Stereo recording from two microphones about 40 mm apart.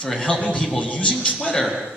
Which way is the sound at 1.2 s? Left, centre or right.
Left.